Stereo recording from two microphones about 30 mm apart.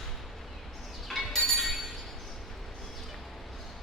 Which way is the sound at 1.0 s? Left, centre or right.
Centre.